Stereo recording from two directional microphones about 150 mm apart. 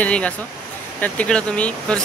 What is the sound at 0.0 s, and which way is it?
Speech, 10° left (ahead or behind).